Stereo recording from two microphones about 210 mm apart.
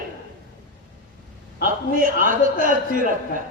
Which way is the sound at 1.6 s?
40° right (ahead or behind).